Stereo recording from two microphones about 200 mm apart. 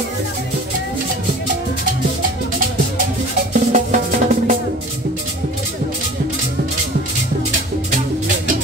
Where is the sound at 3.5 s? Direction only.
40° right (ahead or behind).